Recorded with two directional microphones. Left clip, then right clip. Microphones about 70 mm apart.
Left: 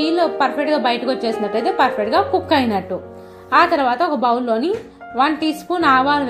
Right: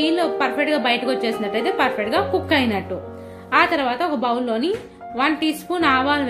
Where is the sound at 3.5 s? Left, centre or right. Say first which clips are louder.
Left 4 dB; left.